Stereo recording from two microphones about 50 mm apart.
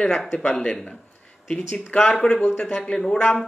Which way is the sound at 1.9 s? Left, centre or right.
Left.